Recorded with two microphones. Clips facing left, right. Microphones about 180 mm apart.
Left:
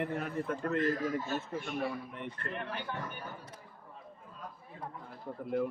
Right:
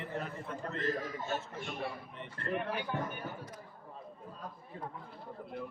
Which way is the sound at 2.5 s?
10° right (ahead or behind).